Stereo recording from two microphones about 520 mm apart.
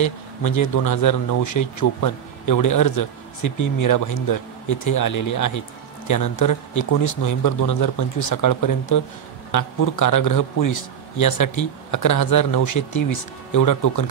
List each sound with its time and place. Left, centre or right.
0.0 s speech: left